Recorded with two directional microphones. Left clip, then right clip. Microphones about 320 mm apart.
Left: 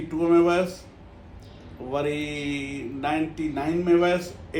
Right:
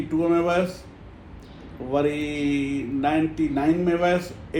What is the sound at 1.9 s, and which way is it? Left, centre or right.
Speech, centre.